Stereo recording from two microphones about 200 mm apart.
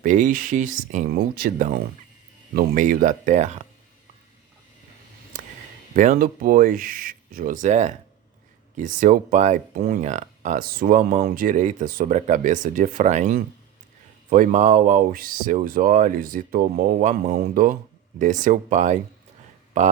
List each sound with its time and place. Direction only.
0.0 s speech: 40° right (ahead or behind)
5.9 s speech: 45° right (ahead or behind)